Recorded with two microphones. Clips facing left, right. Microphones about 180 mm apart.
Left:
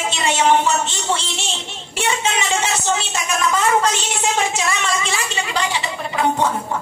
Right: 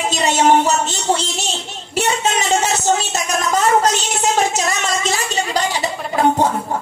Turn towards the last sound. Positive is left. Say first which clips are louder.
# right 3 dB
turn(degrees=-40)  # may be behind; listen again after turning